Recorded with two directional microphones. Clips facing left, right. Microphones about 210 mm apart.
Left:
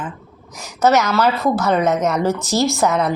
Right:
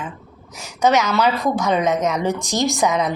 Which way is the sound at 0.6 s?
10° right (ahead or behind).